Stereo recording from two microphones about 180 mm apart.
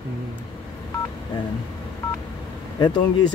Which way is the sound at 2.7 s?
25° left (ahead or behind).